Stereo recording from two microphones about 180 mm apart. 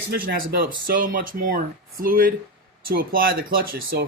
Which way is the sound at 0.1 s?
60° right (ahead or behind).